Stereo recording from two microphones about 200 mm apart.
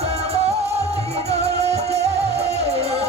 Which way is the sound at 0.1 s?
30° right (ahead or behind).